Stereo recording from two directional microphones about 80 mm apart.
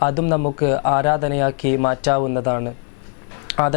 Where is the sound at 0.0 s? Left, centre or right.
Centre.